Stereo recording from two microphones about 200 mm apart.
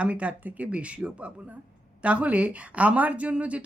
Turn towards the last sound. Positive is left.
turn(degrees=-5)  # may be behind; listen again after turning